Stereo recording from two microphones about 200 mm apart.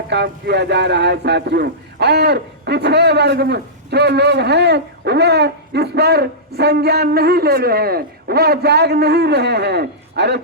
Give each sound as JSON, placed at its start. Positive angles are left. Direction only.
{"t": 0.1, "sound": "speech", "side_deg": -60}